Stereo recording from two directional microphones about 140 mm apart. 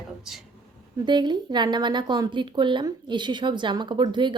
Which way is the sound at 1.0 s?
30° right (ahead or behind).